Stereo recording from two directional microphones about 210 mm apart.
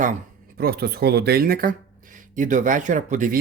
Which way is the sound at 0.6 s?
50° right (ahead or behind).